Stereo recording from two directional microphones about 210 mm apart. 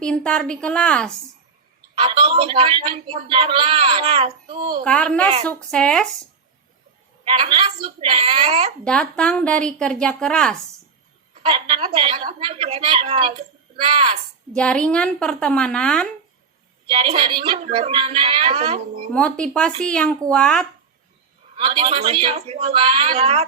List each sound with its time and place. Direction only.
0.0 s a woman's voice: 5° left (ahead or behind)
2.0 s a man's voice: 25° right (ahead or behind)
4.8 s a woman's voice: 5° left (ahead or behind)
7.3 s a man's voice: 25° right (ahead or behind)
8.8 s a woman's voice: 5° left (ahead or behind)
11.4 s a man's voice: 25° right (ahead or behind)
14.5 s a woman's voice: 5° left (ahead or behind)
16.8 s a man's voice: 25° right (ahead or behind)
19.1 s a woman's voice: 5° left (ahead or behind)
21.5 s a man's voice: 25° right (ahead or behind)